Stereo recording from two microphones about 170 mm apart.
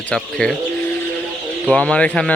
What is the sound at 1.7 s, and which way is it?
Speech, 5° left (ahead or behind).